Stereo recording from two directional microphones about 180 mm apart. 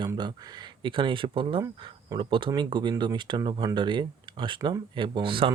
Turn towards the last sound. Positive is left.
turn(degrees=-30)  # may be behind; listen again after turning